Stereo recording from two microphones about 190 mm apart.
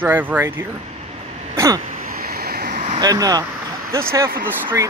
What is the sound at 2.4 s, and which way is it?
Vehicle, 50° right (ahead or behind).